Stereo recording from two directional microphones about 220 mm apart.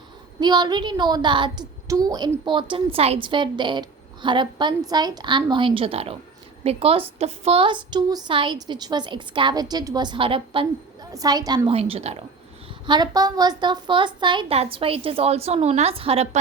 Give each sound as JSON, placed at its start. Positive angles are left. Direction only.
{"t": 0.3, "sound": "a woman's voice", "side_deg": -20}